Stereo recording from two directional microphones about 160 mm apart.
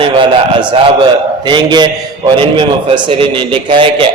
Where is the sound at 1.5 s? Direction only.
30° right (ahead or behind).